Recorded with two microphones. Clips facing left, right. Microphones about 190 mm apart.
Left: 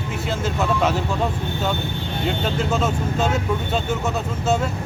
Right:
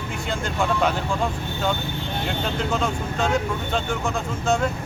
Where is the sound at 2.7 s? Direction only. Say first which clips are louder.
Left 3 dB; 5° left (ahead or behind).